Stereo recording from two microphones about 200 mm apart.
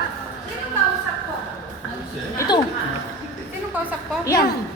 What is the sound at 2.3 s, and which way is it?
Speech, 15° left (ahead or behind).